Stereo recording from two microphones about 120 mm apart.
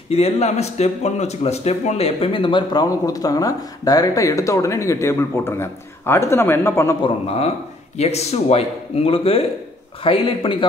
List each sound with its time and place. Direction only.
0.1 s speech: 60° left (ahead or behind); by 7.0 s 20° left (ahead or behind)
7.2 s a man's voice: 60° left (ahead or behind)